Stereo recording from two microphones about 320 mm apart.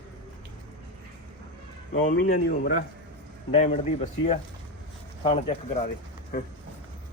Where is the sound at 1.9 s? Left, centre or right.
Left.